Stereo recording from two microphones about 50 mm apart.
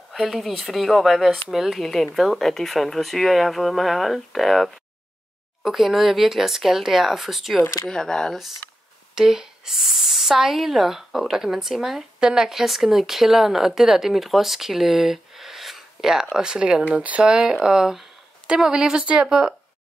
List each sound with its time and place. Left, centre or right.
0.3 s speech: centre
7.9 s speech: centre
9.1 s speech: centre; by 17.3 s right
17.3 s speech: centre